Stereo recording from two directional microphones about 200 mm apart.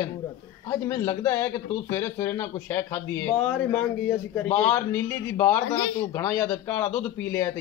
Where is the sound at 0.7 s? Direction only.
15° left (ahead or behind).